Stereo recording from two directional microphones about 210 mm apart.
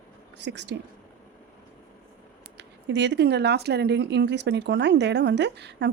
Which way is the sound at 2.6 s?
55° right (ahead or behind).